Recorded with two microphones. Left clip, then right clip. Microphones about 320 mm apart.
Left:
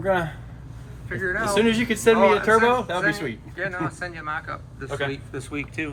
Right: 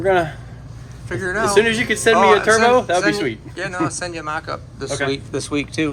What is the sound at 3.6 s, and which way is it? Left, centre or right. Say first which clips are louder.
Speech: right 4 dB; centre.